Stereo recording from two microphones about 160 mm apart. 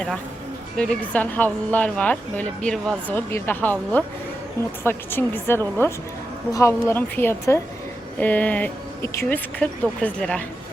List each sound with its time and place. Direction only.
0.8 s speech: 5° left (ahead or behind)
3.2 s speech: 15° left (ahead or behind)